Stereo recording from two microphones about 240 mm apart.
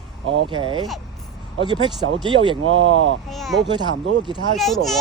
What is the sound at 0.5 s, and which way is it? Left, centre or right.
Speech, right.